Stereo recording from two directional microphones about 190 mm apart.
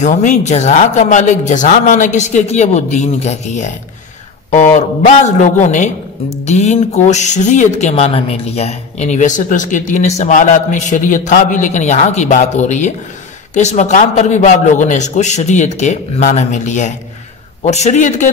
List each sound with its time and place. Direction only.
0.0 s speech: 40° left (ahead or behind)